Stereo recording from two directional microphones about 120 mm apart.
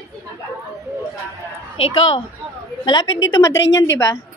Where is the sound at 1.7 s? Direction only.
55° left (ahead or behind).